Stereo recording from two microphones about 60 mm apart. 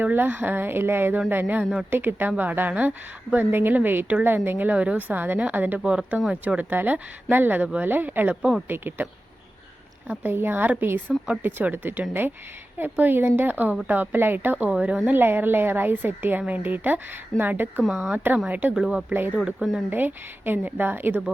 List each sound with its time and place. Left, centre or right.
0.0 s speech: right
4.7 s speech: right
5.8 s speech: centre
6.6 s speech: right
8.4 s speech: centre
8.6 s speech: right
10.1 s speech: right
14.7 s speech: centre
15.1 s speech: right
18.7 s speech: centre
19.9 s speech: right